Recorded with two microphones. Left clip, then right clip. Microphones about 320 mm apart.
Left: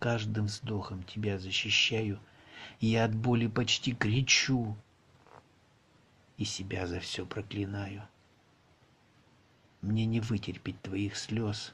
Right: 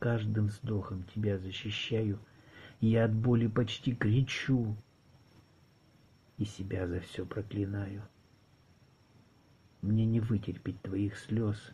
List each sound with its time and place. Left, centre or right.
0.0 s speech: centre
6.3 s speech: centre
9.8 s speech: centre